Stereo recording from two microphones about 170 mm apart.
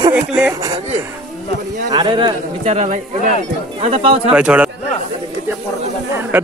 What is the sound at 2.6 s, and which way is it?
Speech, 40° right (ahead or behind).